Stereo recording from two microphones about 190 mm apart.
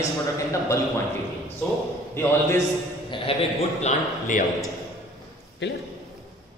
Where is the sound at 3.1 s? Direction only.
30° left (ahead or behind).